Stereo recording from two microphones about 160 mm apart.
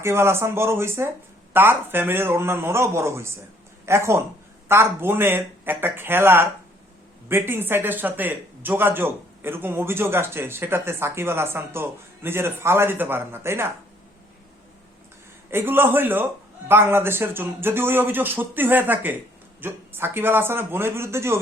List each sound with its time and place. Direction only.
0.0 s a man's voice: 15° right (ahead or behind)
15.4 s a man's voice: 15° right (ahead or behind)